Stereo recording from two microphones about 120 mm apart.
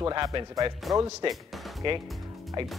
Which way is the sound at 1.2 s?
45° right (ahead or behind).